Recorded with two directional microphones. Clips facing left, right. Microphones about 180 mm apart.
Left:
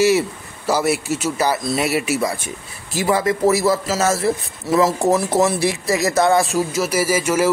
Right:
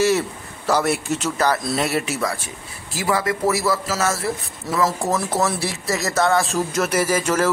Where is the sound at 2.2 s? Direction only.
20° left (ahead or behind).